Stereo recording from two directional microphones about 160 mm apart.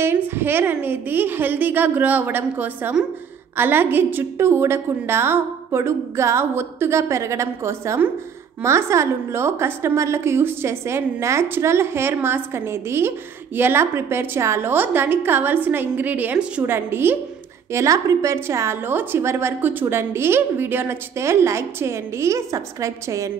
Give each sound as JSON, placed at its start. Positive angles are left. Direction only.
{"t": 0.0, "sound": "a woman's voice", "side_deg": -10}